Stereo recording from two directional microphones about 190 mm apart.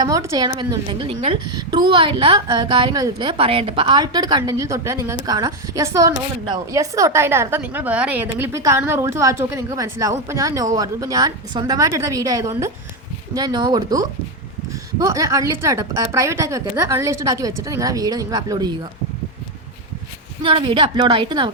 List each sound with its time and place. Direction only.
0.0 s a woman's voice: 15° right (ahead or behind)
20.4 s a woman's voice: 25° right (ahead or behind)